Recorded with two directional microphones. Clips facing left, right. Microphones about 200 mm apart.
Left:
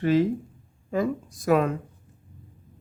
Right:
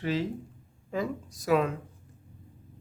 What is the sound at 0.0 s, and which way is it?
Speech, 50° left (ahead or behind).